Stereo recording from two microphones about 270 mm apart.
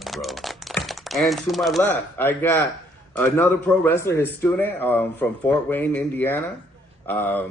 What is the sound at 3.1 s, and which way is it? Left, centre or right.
Speech, centre.